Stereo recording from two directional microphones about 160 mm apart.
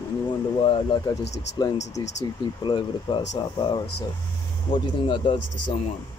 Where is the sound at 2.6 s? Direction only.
30° left (ahead or behind).